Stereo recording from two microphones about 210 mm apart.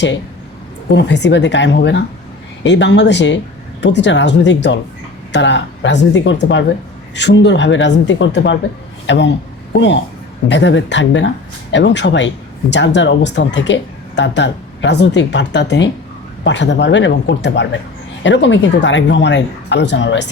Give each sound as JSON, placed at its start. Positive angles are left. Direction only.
{"t": 0.9, "sound": "speech", "side_deg": 55}